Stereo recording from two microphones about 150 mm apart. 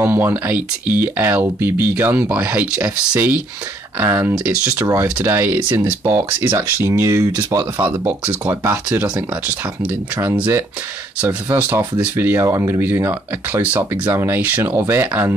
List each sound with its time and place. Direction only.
0.0 s speech: 15° right (ahead or behind)
10.2 s speech: 15° right (ahead or behind)